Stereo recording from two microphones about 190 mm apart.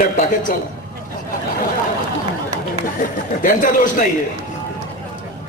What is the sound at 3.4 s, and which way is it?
Speech, 45° left (ahead or behind).